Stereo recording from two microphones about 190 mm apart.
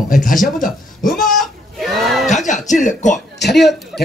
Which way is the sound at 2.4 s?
40° left (ahead or behind).